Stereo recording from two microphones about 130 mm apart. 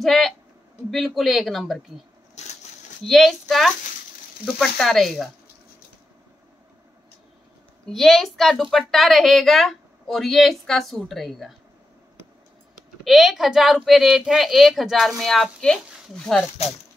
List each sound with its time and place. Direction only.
0.0 s a woman's voice: centre (ahead or behind)
2.4 s a sound: 60° left (ahead or behind)
3.0 s a woman's voice: centre (ahead or behind)
7.9 s a woman's voice: centre (ahead or behind)
13.0 s a woman's voice: centre (ahead or behind)